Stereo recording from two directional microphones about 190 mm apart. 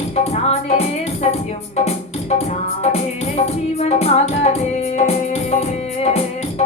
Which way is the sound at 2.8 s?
35° left (ahead or behind).